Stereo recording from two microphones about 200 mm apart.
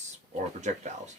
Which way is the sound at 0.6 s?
35° right (ahead or behind).